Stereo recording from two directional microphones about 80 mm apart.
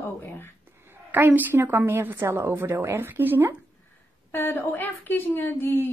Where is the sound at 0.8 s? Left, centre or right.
Right.